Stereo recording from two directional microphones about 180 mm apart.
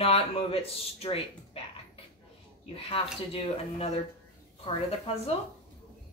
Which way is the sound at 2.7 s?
30° left (ahead or behind).